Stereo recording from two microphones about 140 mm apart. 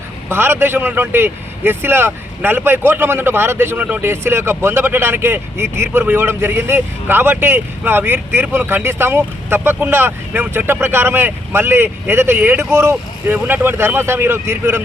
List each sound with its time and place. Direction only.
0.3 s speech: 15° right (ahead or behind)